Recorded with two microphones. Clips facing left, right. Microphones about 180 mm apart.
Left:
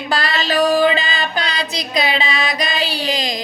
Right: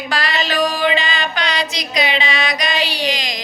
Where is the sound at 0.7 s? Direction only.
40° left (ahead or behind).